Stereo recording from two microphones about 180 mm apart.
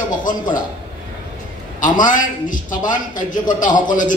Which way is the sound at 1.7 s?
45° left (ahead or behind).